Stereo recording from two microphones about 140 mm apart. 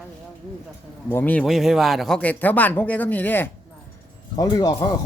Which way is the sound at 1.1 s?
10° left (ahead or behind).